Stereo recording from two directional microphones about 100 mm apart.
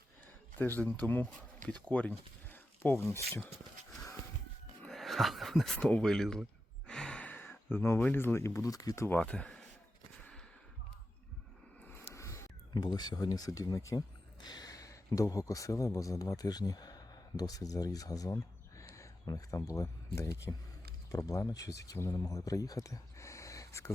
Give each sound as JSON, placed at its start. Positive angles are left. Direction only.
{"t": 0.6, "sound": "speech", "side_deg": 20}
{"t": 4.9, "sound": "speech", "side_deg": 0}
{"t": 6.8, "sound": "a sound", "side_deg": 10}
{"t": 9.0, "sound": "speech", "side_deg": 10}
{"t": 12.1, "sound": "a sound", "side_deg": 30}
{"t": 12.7, "sound": "speech", "side_deg": 45}